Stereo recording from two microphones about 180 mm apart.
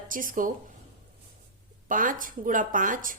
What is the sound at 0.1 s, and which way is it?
Speech, 50° right (ahead or behind).